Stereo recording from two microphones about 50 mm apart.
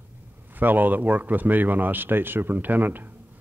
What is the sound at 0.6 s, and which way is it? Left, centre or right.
Speech, right.